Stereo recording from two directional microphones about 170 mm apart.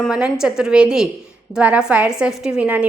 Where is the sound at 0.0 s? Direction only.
5° right (ahead or behind).